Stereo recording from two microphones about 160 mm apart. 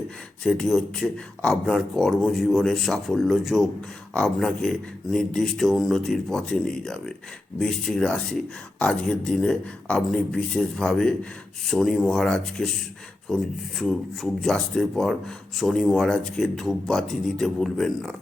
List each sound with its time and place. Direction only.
0.4 s speech: 5° left (ahead or behind)